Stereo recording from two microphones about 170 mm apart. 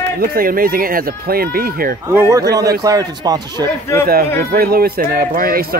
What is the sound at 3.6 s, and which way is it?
Speech, 15° left (ahead or behind).